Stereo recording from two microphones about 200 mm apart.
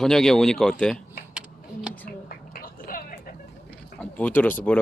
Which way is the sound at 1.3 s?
5° right (ahead or behind).